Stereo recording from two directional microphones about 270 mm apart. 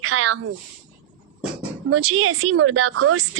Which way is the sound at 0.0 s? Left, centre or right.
Right.